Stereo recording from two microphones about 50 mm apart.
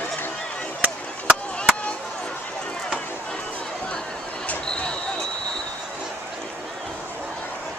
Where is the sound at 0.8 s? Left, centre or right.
Right.